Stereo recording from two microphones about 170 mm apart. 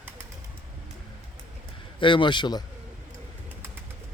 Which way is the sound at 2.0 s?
30° left (ahead or behind).